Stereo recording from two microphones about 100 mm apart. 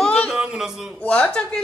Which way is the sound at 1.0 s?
10° left (ahead or behind).